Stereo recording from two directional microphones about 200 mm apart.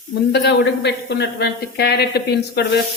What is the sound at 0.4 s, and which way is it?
Speech, 60° left (ahead or behind).